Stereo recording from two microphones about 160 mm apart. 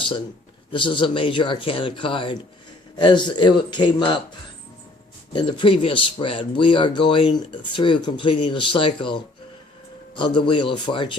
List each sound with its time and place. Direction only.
0.7 s speech: 30° left (ahead or behind)
5.3 s speech: 30° left (ahead or behind)